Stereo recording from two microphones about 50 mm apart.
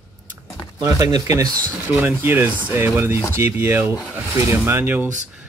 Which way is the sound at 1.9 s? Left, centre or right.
Right.